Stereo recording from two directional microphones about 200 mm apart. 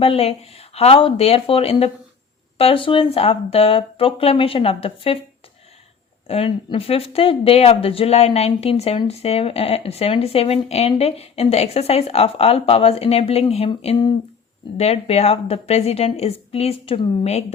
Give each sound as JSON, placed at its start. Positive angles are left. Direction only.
{"t": 0.0, "sound": "speech", "side_deg": 30}
{"t": 6.2, "sound": "speech", "side_deg": 30}